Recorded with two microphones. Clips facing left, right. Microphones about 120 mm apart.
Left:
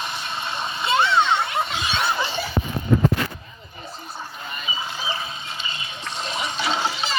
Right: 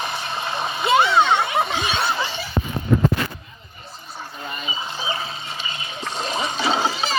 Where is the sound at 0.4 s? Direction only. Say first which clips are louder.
Right 3 dB; 45° right (ahead or behind).